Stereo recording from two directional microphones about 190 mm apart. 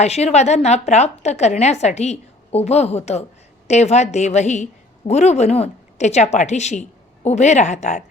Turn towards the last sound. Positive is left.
turn(degrees=35)  # may be behind; listen again after turning